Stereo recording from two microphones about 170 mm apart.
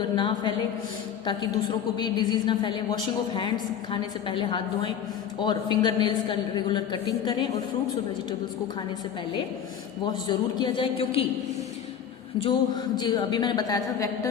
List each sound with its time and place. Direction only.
0.2 s a woman's voice: 25° left (ahead or behind)
10.2 s a woman's voice: 25° left (ahead or behind)
12.4 s a woman's voice: 30° left (ahead or behind)